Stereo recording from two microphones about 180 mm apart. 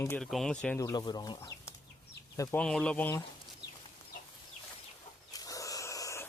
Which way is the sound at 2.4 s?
5° left (ahead or behind).